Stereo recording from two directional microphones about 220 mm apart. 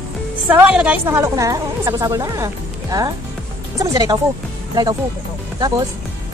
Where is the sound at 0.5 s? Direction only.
5° right (ahead or behind).